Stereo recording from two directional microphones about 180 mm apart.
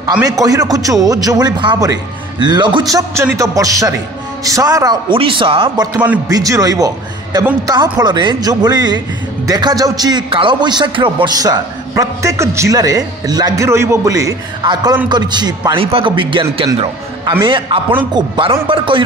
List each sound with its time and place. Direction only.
0.4 s a man's voice: 20° right (ahead or behind)